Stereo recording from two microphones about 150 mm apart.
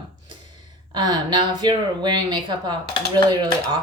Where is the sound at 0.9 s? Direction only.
30° right (ahead or behind).